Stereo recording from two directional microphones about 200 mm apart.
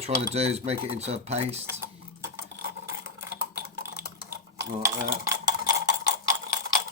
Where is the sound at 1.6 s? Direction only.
10° right (ahead or behind).